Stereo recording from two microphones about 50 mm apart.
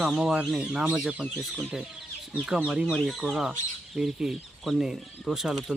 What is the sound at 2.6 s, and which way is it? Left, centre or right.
Speech, right.